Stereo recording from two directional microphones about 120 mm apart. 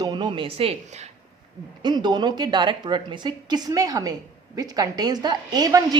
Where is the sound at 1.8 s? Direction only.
35° right (ahead or behind).